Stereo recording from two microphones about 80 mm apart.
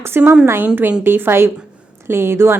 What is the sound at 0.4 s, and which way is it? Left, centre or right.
A woman's voice, right.